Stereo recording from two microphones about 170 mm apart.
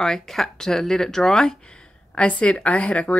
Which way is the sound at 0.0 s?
5° left (ahead or behind).